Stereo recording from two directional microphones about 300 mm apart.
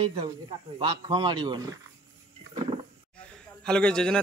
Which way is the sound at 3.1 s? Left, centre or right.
Centre.